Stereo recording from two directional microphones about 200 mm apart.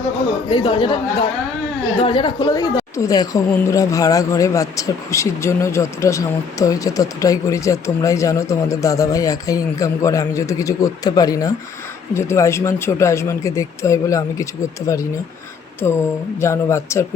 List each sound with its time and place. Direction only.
0.5 s speech: 25° left (ahead or behind)
2.0 s a woman's voice: 25° left (ahead or behind)